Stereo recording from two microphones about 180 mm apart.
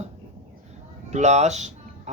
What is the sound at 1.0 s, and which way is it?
Speech, 40° right (ahead or behind).